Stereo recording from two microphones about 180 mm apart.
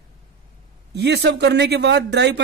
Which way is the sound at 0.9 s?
65° right (ahead or behind).